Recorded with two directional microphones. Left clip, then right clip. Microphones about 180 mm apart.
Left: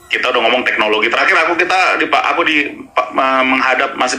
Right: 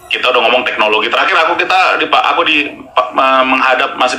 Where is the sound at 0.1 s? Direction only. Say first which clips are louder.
Right 3 dB; 15° left (ahead or behind).